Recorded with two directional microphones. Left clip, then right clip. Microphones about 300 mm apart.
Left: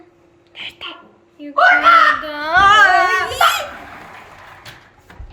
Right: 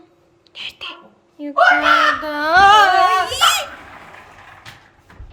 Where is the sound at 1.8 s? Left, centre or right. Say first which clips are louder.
Left 3 dB; right.